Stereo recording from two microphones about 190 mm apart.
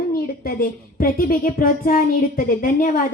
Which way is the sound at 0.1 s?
50° left (ahead or behind).